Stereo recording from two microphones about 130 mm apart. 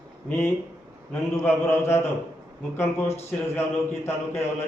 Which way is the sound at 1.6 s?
15° left (ahead or behind).